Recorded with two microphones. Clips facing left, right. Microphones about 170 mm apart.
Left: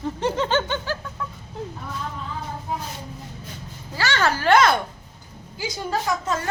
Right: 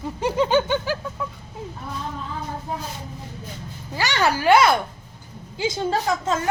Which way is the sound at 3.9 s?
15° right (ahead or behind).